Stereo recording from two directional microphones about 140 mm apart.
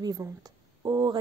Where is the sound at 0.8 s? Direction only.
30° right (ahead or behind).